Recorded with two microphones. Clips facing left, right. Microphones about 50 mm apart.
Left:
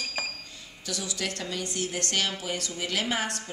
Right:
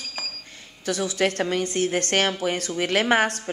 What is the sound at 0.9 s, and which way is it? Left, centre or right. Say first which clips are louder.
A woman's voice: right 10 dB; right.